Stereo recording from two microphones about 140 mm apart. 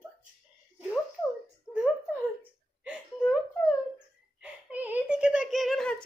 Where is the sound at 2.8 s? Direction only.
5° right (ahead or behind).